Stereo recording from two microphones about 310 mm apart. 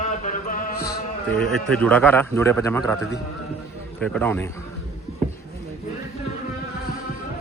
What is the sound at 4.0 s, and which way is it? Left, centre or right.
Speech, centre.